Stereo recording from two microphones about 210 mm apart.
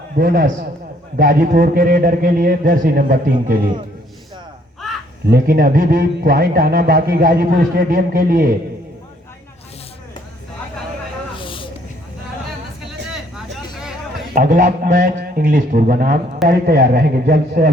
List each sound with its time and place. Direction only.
0.2 s a man's voice: 45° right (ahead or behind)
5.3 s a man's voice: 45° right (ahead or behind)
11.3 s a sound: 25° left (ahead or behind)
14.3 s a man's voice: 45° right (ahead or behind)